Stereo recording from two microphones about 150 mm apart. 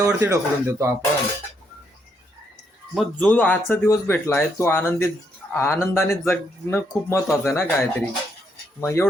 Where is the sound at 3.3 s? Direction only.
10° left (ahead or behind).